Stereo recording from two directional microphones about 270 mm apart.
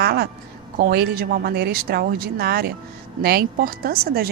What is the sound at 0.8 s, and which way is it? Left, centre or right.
A woman's voice, right.